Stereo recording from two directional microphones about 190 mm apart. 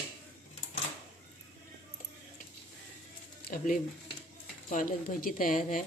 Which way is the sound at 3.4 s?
45° left (ahead or behind).